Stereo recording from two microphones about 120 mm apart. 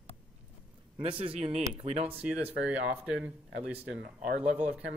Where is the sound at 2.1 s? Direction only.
10° right (ahead or behind).